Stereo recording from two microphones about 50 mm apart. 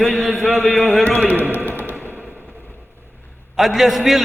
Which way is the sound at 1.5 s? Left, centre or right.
Left.